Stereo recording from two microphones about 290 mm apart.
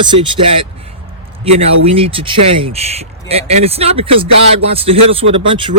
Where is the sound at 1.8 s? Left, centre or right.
Centre.